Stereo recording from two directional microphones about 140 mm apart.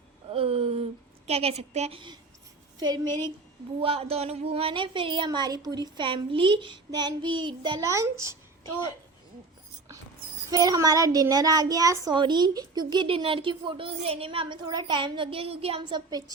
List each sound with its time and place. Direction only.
0.3 s a sound: 45° right (ahead or behind)
1.3 s a woman's voice: 45° right (ahead or behind)
2.7 s a woman's voice: 30° right (ahead or behind)
3.8 s a woman's voice: 45° right (ahead or behind); by 8.4 s 20° right (ahead or behind)
10.5 s a woman's voice: 25° right (ahead or behind)